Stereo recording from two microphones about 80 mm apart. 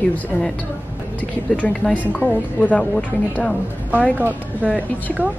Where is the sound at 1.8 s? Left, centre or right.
Centre.